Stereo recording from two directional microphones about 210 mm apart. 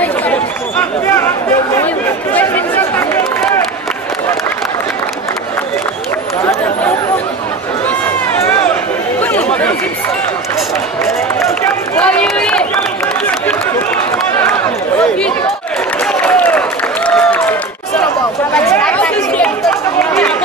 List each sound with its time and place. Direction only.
0.0 s chatter: 10° left (ahead or behind)
2.3 s a sound: 10° left (ahead or behind)
9.2 s chatter: 5° left (ahead or behind)
11.6 s run: 5° left (ahead or behind)
15.0 s chatter: 5° left (ahead or behind)
16.0 s applause: 5° left (ahead or behind)
18.5 s chatter: 5° left (ahead or behind)